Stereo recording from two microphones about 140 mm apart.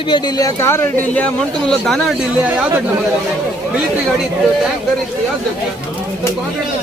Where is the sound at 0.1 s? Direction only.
30° left (ahead or behind); by 2.0 s 5° left (ahead or behind).